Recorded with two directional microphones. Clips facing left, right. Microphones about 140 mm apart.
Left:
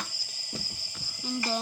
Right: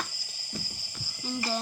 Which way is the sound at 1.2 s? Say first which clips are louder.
Left 1 dB; centre (ahead or behind).